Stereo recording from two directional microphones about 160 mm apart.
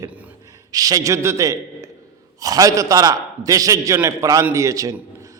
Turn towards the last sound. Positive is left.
turn(degrees=-20)  # may be behind; listen again after turning